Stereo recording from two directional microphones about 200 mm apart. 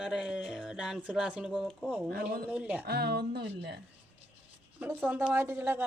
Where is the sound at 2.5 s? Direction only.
5° right (ahead or behind).